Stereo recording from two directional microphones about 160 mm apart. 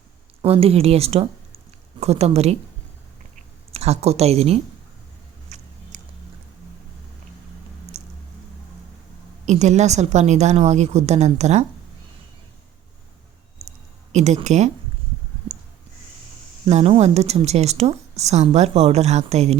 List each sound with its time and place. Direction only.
0.4 s a woman's voice: 40° right (ahead or behind)
3.7 s speech: 40° right (ahead or behind)
5.5 s biting: 45° right (ahead or behind)
5.9 s music: 50° right (ahead or behind)
7.9 s squish: 45° right (ahead or behind)
9.5 s a woman's voice: 45° right (ahead or behind)
14.1 s a woman's voice: 45° right (ahead or behind)
16.6 s a woman's voice: 40° right (ahead or behind)